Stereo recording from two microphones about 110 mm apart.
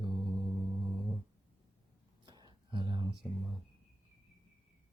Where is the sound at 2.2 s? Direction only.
45° right (ahead or behind).